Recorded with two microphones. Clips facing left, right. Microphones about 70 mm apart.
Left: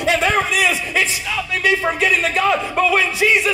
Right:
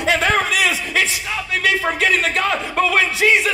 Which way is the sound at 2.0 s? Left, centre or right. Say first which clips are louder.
Left 1 dB; right.